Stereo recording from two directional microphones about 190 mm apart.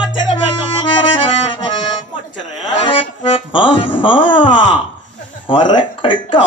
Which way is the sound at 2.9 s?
25° left (ahead or behind).